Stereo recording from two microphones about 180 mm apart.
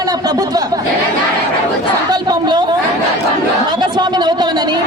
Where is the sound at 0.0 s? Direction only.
20° right (ahead or behind).